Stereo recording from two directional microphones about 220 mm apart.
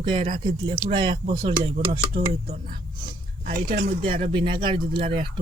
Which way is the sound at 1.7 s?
40° right (ahead or behind).